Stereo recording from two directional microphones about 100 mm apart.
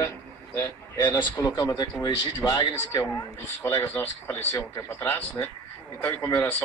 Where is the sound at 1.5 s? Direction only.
40° left (ahead or behind).